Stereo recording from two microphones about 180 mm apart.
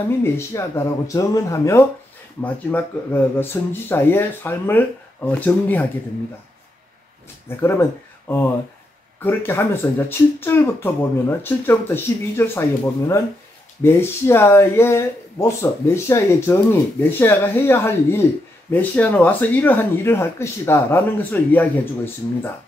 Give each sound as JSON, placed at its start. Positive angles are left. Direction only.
{"t": 0.2, "sound": "speech", "side_deg": 15}
{"t": 7.4, "sound": "speech", "side_deg": 15}